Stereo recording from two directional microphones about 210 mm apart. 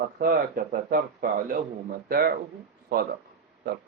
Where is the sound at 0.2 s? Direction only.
40° right (ahead or behind).